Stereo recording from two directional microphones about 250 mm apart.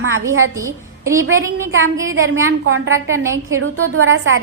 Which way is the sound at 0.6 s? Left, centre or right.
Centre.